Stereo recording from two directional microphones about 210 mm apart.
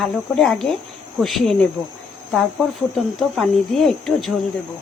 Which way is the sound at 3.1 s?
Centre (ahead or behind).